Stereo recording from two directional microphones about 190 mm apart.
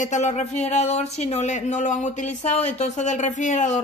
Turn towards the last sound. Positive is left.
turn(degrees=40)  # may be behind; listen again after turning